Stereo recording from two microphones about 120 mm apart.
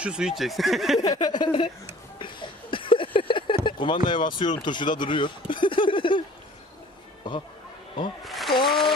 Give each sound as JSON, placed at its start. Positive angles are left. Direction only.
{"t": 0.0, "sound": "speech", "side_deg": -5}
{"t": 0.9, "sound": "speech", "side_deg": 30}
{"t": 8.2, "sound": "a sound", "side_deg": 0}